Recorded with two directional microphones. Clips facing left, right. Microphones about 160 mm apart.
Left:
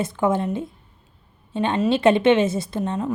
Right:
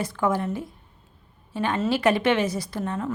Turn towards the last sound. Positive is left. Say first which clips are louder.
# left 4 dB
turn(degrees=20)  # may be behind; listen again after turning